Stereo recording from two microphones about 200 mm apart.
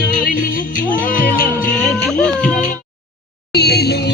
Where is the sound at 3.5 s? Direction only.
55° left (ahead or behind).